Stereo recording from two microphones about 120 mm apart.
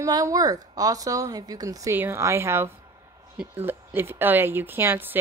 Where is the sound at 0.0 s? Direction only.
30° right (ahead or behind).